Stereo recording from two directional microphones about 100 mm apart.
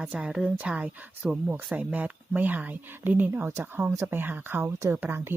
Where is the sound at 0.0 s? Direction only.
10° right (ahead or behind).